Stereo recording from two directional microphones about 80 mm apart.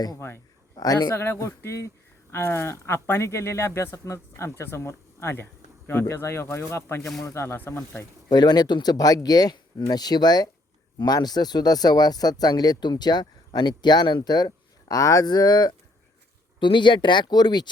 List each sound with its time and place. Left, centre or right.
0.8 s speech: left
1.1 s speech: left
7.4 s speech: left
8.3 s speech: left
16.6 s speech: left